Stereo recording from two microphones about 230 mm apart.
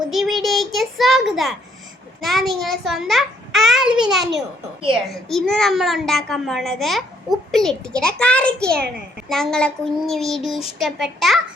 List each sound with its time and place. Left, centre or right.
0.0 s a child's voice: centre